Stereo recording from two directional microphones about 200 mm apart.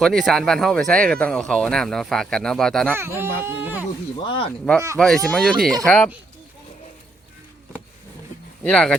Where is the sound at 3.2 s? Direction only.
10° right (ahead or behind).